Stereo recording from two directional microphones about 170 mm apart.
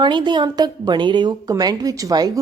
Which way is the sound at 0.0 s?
25° right (ahead or behind).